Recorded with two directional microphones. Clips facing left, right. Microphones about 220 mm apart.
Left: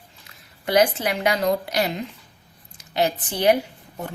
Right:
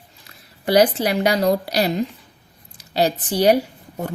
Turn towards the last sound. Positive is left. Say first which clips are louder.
# right 5 dB
turn(degrees=-35)  # may be behind; listen again after turning